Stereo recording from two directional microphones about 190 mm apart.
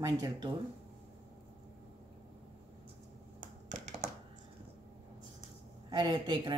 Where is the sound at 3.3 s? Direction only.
40° right (ahead or behind).